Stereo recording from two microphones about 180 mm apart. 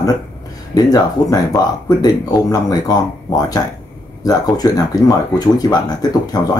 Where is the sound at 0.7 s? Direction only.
20° left (ahead or behind).